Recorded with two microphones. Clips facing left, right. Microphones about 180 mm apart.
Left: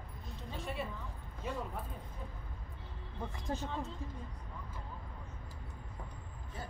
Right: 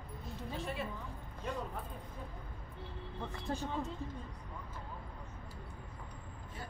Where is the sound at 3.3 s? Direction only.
15° left (ahead or behind).